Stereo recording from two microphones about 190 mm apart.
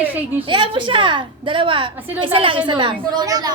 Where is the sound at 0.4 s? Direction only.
25° right (ahead or behind).